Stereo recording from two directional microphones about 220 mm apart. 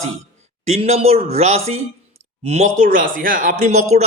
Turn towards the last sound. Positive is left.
turn(degrees=-35)  # may be behind; listen again after turning